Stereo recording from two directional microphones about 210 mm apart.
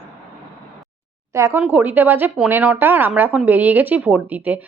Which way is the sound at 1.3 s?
15° right (ahead or behind).